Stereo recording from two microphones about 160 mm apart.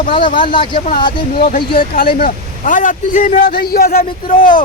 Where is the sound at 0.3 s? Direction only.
30° left (ahead or behind).